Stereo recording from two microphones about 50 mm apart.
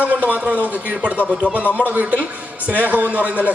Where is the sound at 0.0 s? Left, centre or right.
Right.